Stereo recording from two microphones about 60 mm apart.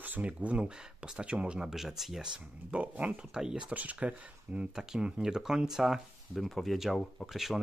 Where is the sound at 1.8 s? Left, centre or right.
Centre.